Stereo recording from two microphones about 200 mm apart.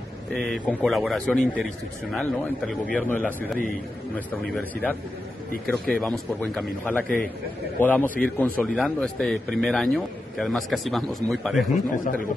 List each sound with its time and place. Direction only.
0.3 s speech: 5° left (ahead or behind)
5.7 s a man's voice: 5° left (ahead or behind)
11.7 s speech: 45° left (ahead or behind)